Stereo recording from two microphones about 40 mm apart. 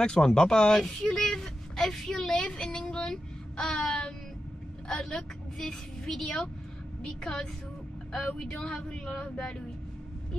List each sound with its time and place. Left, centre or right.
0.0 s a woman's voice: left
3.5 s a sound: centre
4.8 s a woman's voice: centre